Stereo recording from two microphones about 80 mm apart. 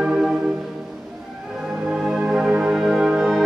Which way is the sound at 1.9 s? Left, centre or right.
Centre.